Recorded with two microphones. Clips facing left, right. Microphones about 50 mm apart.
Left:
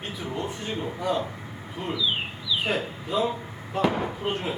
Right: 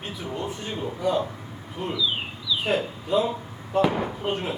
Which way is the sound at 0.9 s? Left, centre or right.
Centre.